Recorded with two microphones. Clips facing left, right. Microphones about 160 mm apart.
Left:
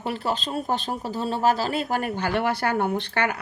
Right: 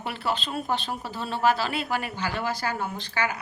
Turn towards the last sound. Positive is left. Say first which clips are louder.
# left 5 dB
turn(degrees=60)  # may be behind; listen again after turning